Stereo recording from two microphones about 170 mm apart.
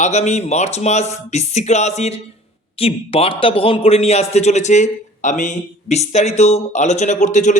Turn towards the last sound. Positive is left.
turn(degrees=45)  # may be behind; listen again after turning